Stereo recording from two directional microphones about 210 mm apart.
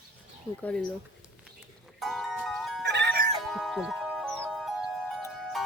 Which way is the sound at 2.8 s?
55° right (ahead or behind).